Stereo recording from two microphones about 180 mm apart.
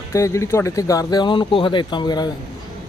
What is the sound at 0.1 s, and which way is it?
Speech, 15° left (ahead or behind).